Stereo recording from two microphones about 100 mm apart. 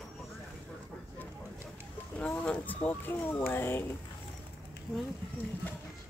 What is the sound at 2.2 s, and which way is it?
Speech, 15° left (ahead or behind).